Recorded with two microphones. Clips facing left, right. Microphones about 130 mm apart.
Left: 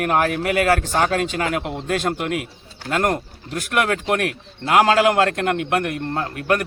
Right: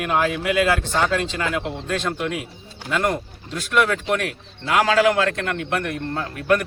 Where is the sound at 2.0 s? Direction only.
60° left (ahead or behind).